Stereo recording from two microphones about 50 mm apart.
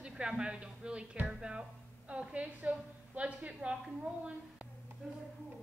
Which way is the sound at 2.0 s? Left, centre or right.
Right.